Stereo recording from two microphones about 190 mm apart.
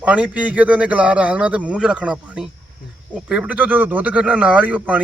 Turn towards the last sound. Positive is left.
turn(degrees=-5)  # may be behind; listen again after turning